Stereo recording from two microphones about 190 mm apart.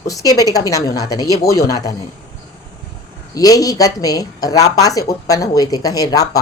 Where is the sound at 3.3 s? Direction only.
20° left (ahead or behind).